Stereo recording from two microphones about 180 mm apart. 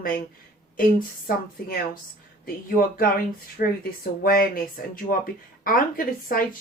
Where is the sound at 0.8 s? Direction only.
50° left (ahead or behind).